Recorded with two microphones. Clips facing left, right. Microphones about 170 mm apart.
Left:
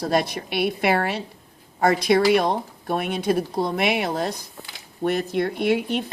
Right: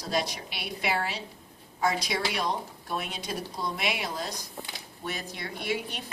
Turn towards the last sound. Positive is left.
turn(degrees=55)  # may be behind; listen again after turning